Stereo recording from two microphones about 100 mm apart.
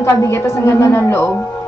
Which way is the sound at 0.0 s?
30° left (ahead or behind).